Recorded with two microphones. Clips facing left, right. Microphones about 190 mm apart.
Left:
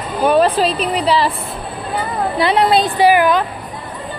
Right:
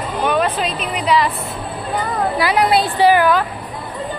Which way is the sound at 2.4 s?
25° left (ahead or behind).